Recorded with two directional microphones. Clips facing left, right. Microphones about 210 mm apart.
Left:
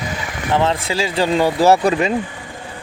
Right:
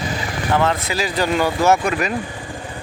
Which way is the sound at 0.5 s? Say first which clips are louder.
Left 2 dB; 25° left (ahead or behind).